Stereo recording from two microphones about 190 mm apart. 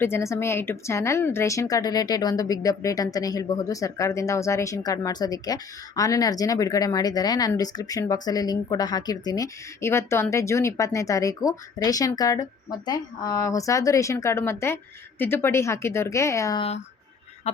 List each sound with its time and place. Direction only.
0.0 s speech: 15° left (ahead or behind)
17.5 s speech: 35° left (ahead or behind)